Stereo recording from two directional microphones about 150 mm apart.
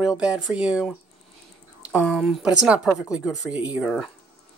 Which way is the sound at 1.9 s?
5° right (ahead or behind).